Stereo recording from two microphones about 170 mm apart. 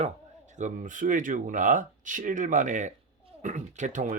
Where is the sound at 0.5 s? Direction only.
45° right (ahead or behind).